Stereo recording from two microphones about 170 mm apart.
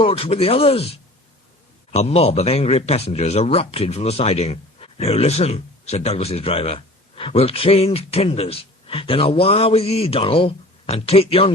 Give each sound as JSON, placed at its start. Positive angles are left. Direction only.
{"t": 0.0, "sound": "speech", "side_deg": 35}